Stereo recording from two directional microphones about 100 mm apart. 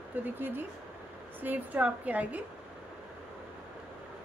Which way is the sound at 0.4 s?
20° right (ahead or behind).